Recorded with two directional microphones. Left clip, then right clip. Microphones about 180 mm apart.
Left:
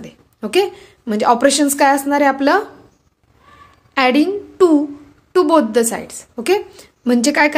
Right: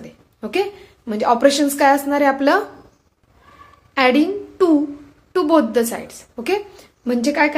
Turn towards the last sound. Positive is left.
turn(degrees=45)  # may be behind; listen again after turning